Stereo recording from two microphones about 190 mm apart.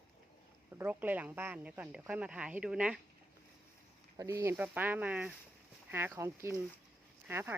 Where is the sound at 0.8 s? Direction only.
10° right (ahead or behind).